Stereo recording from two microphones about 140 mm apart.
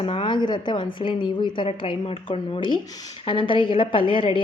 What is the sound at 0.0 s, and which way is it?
A woman's voice, 40° left (ahead or behind).